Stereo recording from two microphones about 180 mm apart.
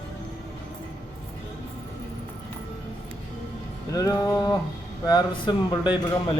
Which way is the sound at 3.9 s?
20° left (ahead or behind).